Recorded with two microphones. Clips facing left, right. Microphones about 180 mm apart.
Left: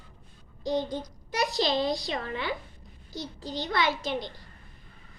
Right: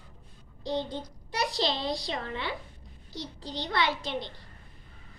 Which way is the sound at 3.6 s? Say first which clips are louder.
Left 1 dB; 30° right (ahead or behind).